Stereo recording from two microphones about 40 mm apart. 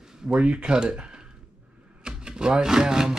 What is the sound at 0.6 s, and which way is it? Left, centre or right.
Speech, right.